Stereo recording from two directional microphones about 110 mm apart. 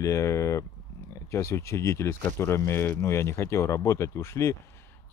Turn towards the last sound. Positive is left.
turn(degrees=25)  # may be behind; listen again after turning